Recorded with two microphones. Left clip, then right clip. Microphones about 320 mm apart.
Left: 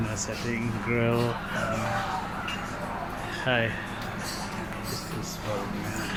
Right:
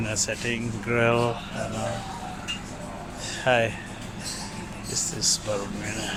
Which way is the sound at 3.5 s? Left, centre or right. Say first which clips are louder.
Right 5 dB; right.